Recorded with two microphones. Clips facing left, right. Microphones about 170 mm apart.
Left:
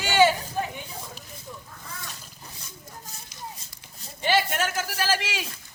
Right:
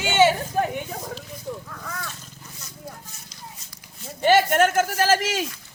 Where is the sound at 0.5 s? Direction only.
60° right (ahead or behind).